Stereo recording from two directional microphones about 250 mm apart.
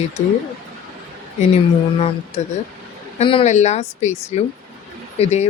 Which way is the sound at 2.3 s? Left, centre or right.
Left.